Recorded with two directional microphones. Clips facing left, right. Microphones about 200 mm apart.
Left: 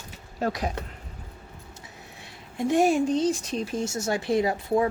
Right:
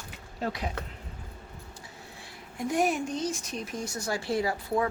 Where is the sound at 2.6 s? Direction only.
25° left (ahead or behind).